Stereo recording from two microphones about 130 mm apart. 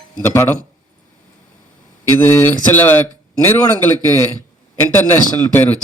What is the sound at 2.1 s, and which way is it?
Speech, 15° left (ahead or behind).